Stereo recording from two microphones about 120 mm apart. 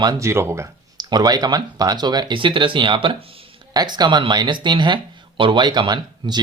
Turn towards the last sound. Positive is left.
turn(degrees=-35)  # may be behind; listen again after turning